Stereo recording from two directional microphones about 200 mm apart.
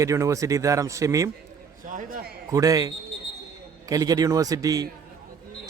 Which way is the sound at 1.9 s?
45° right (ahead or behind).